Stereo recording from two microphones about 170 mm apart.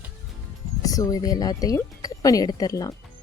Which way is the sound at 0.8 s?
20° left (ahead or behind).